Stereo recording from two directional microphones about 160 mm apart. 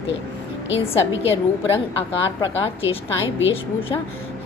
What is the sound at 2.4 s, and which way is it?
Speech, 35° left (ahead or behind).